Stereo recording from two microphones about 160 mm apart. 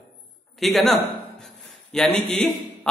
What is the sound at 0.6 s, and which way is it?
A man's voice, centre (ahead or behind).